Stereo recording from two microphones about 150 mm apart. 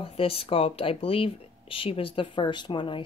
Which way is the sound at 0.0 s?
40° left (ahead or behind).